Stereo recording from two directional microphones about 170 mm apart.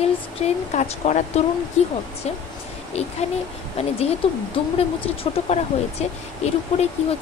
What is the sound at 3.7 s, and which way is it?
Speech, 35° left (ahead or behind).